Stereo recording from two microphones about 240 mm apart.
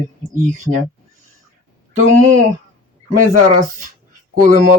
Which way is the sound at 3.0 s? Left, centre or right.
Right.